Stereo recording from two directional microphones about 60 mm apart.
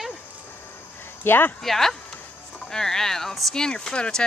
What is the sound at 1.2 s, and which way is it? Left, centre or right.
Speech, left.